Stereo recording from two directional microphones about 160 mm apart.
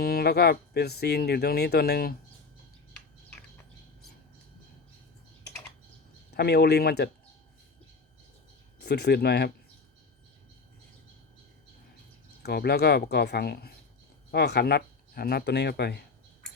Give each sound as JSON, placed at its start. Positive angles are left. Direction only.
{"t": 0.0, "sound": "speech", "side_deg": 70}
{"t": 6.3, "sound": "speech", "side_deg": 90}
{"t": 8.8, "sound": "speech", "side_deg": 90}
{"t": 12.4, "sound": "speech", "side_deg": 90}